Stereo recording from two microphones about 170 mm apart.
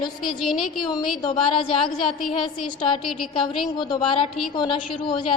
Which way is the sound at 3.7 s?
30° left (ahead or behind).